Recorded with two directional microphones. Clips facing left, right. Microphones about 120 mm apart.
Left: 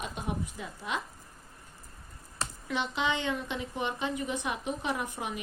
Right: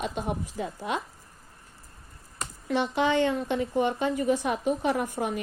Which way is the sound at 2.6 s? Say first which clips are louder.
Right 6 dB; 40° right (ahead or behind).